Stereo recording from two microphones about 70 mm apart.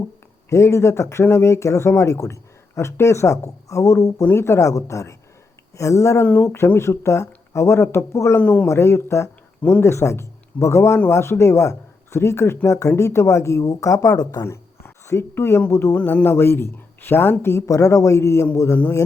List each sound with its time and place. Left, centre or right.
0.5 s speech: left
8.4 s speech: left
8.6 s speech: left
14.4 s a sound: left
15.7 s speech: left
16.0 s speech: left